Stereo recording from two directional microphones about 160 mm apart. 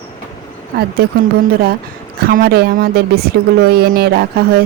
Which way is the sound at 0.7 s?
70° right (ahead or behind).